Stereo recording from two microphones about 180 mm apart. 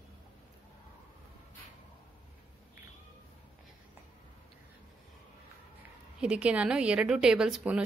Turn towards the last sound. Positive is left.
turn(degrees=-5)  # may be behind; listen again after turning